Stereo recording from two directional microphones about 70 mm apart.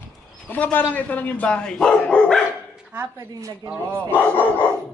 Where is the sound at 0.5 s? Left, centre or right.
Left; by 2.4 s centre.